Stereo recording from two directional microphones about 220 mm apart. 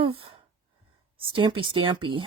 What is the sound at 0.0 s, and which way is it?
Speech, 25° right (ahead or behind).